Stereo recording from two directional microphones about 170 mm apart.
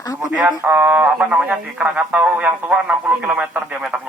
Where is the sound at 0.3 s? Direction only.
10° right (ahead or behind).